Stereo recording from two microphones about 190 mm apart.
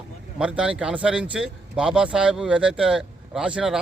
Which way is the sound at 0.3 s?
5° right (ahead or behind).